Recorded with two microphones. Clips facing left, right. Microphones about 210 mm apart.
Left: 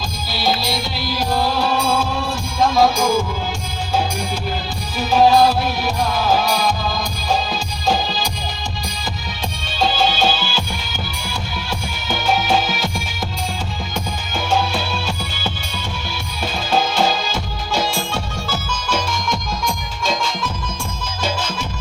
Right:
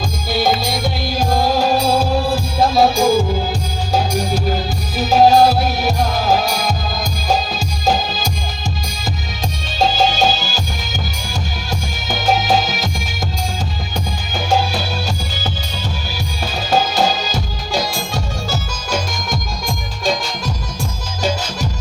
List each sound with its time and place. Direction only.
0.3 s music: 50° right (ahead or behind)
4.9 s music: 40° right (ahead or behind)
9.7 s music: 40° right (ahead or behind)
12.2 s music: 40° right (ahead or behind)
16.7 s music: 40° right (ahead or behind)